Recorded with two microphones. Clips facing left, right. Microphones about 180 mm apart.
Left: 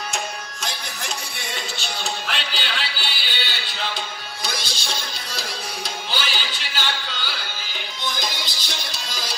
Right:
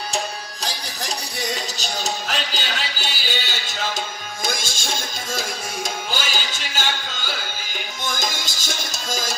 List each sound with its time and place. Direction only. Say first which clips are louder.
0.7 s music: right 2 dB; 40° right (ahead or behind)